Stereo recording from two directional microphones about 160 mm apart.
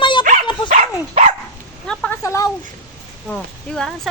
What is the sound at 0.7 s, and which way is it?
Speech, 45° right (ahead or behind).